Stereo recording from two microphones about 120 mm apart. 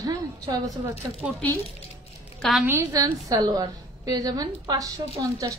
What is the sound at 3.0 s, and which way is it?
A woman's voice, 30° right (ahead or behind).